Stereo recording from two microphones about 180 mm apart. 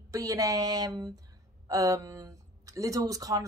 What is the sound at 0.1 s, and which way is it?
A woman's voice, 20° right (ahead or behind).